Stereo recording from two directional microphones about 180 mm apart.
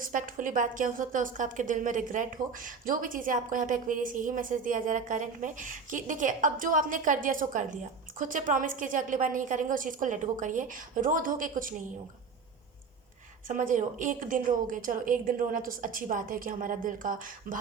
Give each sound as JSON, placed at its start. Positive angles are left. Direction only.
{"t": 0.0, "sound": "a woman's voice", "side_deg": -50}
{"t": 13.5, "sound": "a woman's voice", "side_deg": -45}